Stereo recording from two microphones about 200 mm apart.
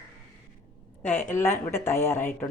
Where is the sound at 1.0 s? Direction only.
10° left (ahead or behind).